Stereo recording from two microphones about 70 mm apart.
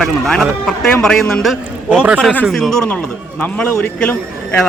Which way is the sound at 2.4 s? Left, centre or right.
Centre.